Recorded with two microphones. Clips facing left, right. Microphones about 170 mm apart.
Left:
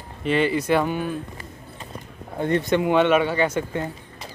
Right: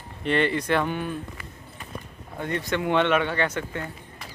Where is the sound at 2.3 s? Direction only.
25° left (ahead or behind).